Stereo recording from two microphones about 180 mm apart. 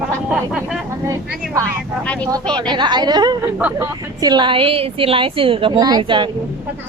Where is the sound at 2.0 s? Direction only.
5° left (ahead or behind).